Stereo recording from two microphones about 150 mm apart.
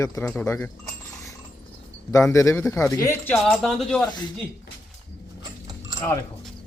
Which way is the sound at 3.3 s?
Centre (ahead or behind).